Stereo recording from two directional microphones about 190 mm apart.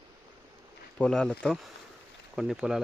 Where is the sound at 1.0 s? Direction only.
5° left (ahead or behind).